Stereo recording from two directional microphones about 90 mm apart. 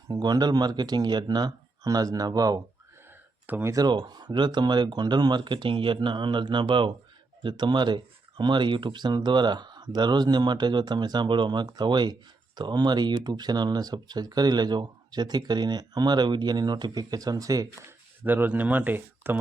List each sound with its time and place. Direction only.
0.1 s speech: 50° right (ahead or behind)
3.6 s speech: 35° right (ahead or behind)
3.8 s speech: 55° right (ahead or behind)
18.2 s speech: 20° right (ahead or behind)